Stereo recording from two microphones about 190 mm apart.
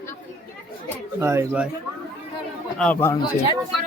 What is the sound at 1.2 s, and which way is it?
Speech, 15° right (ahead or behind).